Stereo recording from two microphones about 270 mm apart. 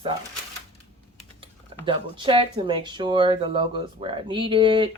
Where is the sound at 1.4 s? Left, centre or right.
Centre.